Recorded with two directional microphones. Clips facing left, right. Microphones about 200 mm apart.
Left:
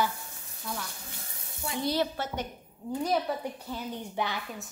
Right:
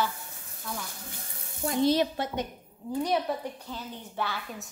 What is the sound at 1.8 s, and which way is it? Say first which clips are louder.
Speech: right 5 dB; 20° right (ahead or behind).